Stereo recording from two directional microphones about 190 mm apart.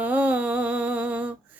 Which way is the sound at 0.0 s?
5° right (ahead or behind).